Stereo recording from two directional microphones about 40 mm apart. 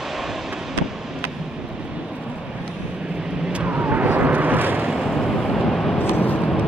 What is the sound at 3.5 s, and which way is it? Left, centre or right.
Vehicle, right.